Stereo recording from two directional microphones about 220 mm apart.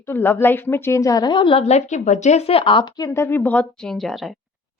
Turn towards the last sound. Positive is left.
turn(degrees=0)  # may be behind; listen again after turning